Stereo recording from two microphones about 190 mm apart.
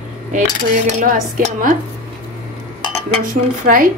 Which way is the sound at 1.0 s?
45° right (ahead or behind).